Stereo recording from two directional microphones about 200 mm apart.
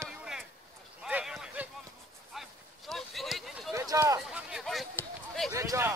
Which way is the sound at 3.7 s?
15° right (ahead or behind).